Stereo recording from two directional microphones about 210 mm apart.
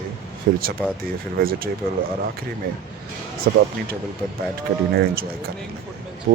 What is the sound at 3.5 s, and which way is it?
Speech, 50° right (ahead or behind).